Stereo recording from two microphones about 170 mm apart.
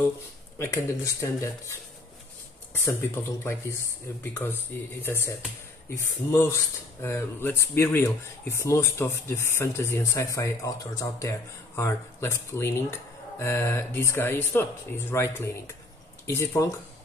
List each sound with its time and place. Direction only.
0.6 s speech: 15° left (ahead or behind)
4.2 s speech: 10° left (ahead or behind)